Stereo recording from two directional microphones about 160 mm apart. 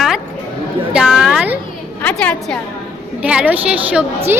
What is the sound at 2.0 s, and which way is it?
Speech, 10° left (ahead or behind).